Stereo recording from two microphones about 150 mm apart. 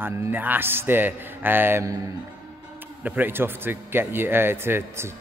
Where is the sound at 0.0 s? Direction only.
10° right (ahead or behind).